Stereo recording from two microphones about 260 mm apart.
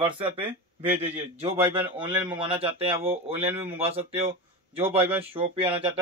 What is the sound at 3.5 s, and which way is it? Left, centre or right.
Speech, centre.